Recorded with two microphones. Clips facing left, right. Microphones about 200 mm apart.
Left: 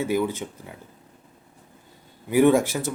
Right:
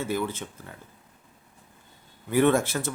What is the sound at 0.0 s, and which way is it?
Speech, 15° left (ahead or behind).